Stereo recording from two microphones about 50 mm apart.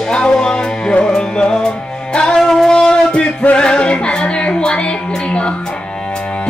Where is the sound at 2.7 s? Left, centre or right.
Centre.